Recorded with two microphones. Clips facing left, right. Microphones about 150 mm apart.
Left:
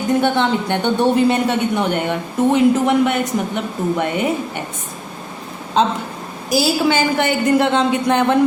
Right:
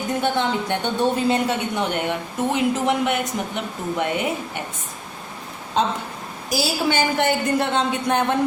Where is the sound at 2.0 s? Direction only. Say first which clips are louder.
Left 6 dB; 55° left (ahead or behind).